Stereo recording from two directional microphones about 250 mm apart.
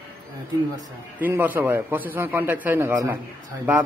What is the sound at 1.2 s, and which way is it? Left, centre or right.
A man's voice, centre.